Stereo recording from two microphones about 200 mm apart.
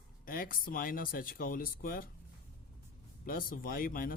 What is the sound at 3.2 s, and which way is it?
Speech, 45° left (ahead or behind).